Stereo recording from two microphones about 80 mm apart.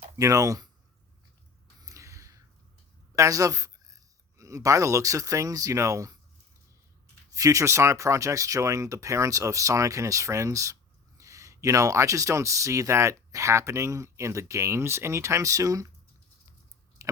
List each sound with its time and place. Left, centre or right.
0.2 s speech: right
1.8 s a sound: right
3.2 s speech: right
7.3 s speech: right
17.0 s chewing: right